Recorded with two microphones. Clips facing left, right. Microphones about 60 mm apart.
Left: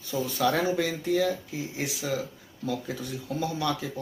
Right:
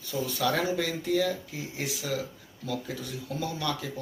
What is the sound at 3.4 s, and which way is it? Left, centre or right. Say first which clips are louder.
Speech: left 3 dB; left.